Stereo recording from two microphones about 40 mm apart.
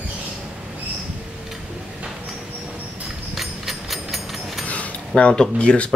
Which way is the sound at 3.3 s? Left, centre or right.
Centre.